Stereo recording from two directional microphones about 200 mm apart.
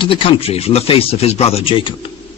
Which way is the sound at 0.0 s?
25° left (ahead or behind).